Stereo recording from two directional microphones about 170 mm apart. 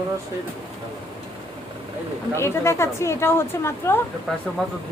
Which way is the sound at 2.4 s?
15° left (ahead or behind).